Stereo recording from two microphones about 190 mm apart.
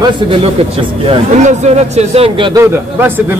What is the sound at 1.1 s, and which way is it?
Speech, 35° right (ahead or behind).